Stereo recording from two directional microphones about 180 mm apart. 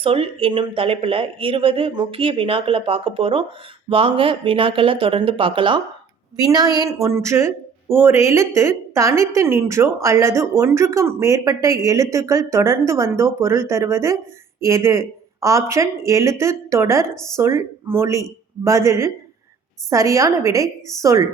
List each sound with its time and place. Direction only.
0.0 s speech: 30° right (ahead or behind)